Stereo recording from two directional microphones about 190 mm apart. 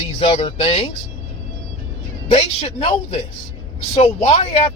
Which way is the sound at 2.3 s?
30° left (ahead or behind).